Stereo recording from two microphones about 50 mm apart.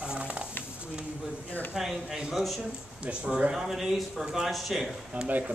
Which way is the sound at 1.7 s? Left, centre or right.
Centre.